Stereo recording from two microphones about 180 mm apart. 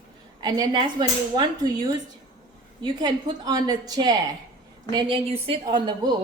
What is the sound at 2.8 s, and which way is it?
A woman's voice, 20° right (ahead or behind).